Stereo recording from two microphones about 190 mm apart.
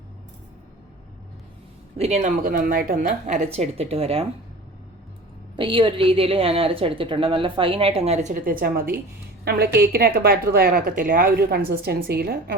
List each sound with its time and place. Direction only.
2.0 s speech: 35° right (ahead or behind)
5.5 s a woman's voice: 25° right (ahead or behind); by 12.5 s 55° right (ahead or behind)